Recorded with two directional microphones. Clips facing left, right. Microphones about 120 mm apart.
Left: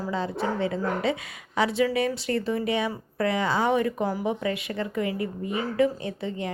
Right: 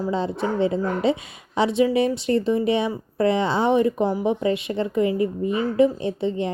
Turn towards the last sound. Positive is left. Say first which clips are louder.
# right 7 dB
turn(degrees=-25)  # may be behind; listen again after turning